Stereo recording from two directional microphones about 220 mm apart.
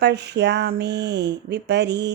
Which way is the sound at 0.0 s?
50° right (ahead or behind).